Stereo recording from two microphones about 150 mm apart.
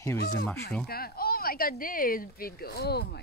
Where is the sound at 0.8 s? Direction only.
90° left.